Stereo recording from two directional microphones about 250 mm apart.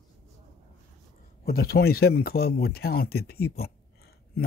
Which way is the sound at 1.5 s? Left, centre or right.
Left.